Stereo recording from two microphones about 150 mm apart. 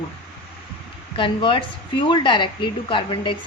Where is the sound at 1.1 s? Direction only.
35° left (ahead or behind).